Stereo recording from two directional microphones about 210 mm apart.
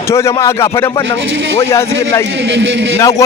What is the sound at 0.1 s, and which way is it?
A man's voice, 15° left (ahead or behind).